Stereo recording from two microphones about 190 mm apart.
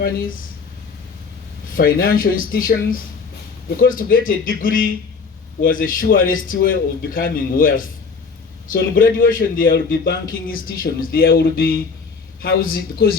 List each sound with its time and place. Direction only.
1.7 s a man's voice: 50° left (ahead or behind)